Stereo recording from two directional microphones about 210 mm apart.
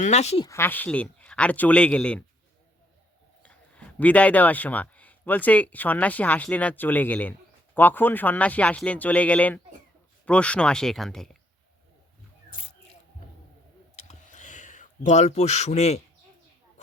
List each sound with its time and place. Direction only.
0.0 s speech: 30° left (ahead or behind)
0.4 s speech: 10° left (ahead or behind)
3.4 s a man's voice: 5° left (ahead or behind)
13.9 s a sound: 35° left (ahead or behind)